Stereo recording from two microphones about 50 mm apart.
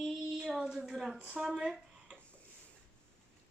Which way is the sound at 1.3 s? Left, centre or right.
Centre.